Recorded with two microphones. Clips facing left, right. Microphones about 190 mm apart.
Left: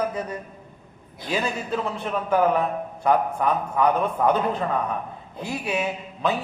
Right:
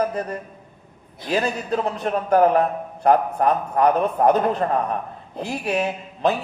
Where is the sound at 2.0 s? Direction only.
55° right (ahead or behind).